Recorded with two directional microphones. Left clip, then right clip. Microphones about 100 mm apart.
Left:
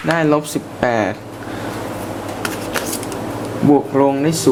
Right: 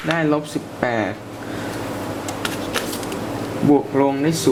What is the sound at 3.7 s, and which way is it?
Speech, 25° left (ahead or behind).